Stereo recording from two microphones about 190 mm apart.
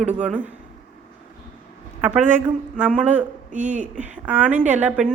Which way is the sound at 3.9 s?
5° right (ahead or behind).